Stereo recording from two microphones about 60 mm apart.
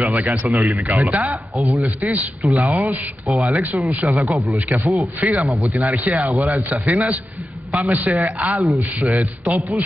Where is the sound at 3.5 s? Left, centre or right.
Right.